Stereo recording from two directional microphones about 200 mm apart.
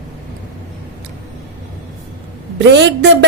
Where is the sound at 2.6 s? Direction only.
60° right (ahead or behind).